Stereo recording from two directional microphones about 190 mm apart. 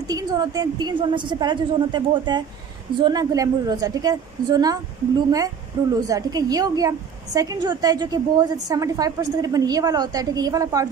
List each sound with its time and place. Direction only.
0.0 s a woman's voice: 20° right (ahead or behind)